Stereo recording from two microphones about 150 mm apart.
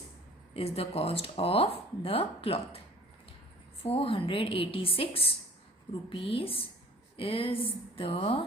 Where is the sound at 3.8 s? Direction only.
40° left (ahead or behind).